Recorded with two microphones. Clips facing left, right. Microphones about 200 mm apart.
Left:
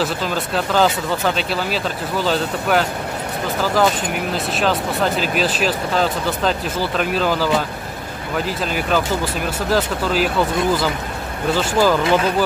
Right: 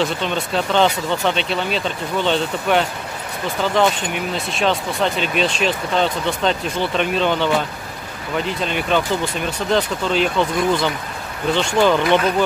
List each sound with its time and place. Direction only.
0.0 s speech: 5° left (ahead or behind)